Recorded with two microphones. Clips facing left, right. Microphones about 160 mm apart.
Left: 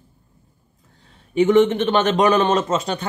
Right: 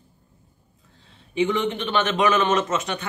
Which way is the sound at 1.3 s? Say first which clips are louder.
Left 8 dB; 45° left (ahead or behind).